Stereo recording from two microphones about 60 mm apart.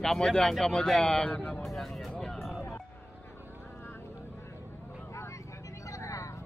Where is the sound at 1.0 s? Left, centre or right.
Centre.